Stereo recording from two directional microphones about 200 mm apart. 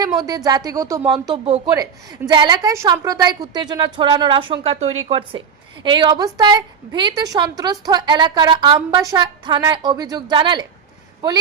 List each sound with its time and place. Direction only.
0.2 s a woman's voice: 20° right (ahead or behind)